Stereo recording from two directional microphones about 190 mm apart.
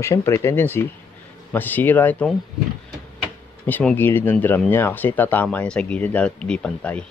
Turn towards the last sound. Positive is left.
turn(degrees=5)  # may be behind; listen again after turning